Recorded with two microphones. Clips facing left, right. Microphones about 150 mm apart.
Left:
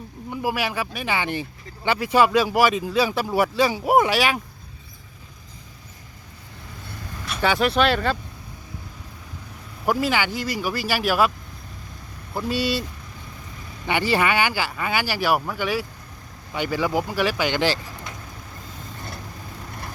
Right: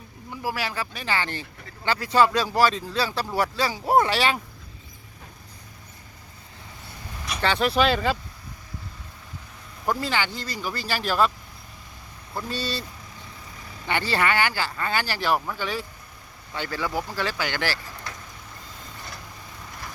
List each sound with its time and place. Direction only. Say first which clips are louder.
0.3 s speech: left 4 dB; 15° left (ahead or behind)
7.4 s speech: left 2 dB; 10° left (ahead or behind)
9.8 s speech: left 4 dB; 10° left (ahead or behind)
12.3 s speech: left 6 dB; 10° left (ahead or behind)
13.8 s speech: left 3 dB; 15° left (ahead or behind)